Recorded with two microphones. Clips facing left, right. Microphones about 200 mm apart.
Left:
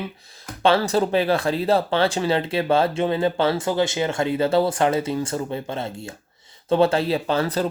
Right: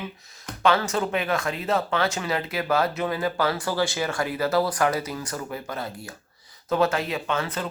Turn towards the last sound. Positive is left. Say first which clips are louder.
# left 6 dB
turn(degrees=35)  # may be behind; listen again after turning